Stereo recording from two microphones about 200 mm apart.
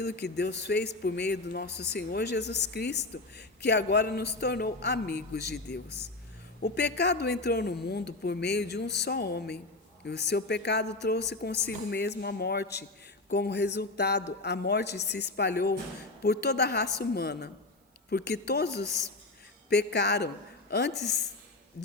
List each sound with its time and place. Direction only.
0.0 s a man's voice: 55° left (ahead or behind)
18.9 s a woman's voice: 15° right (ahead or behind)
19.7 s a man's voice: 55° left (ahead or behind)
20.9 s a woman's voice: centre (ahead or behind)